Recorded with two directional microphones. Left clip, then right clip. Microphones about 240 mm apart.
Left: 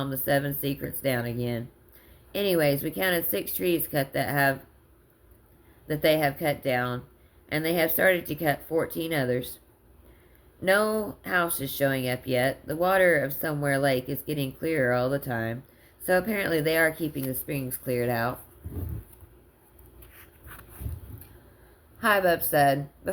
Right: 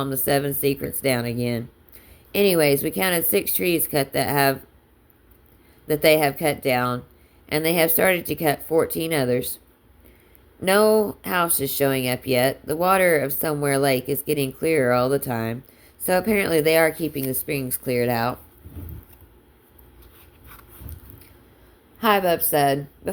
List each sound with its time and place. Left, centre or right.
0.0 s speech: right
5.9 s speech: right
10.6 s speech: right
21.9 s speech: right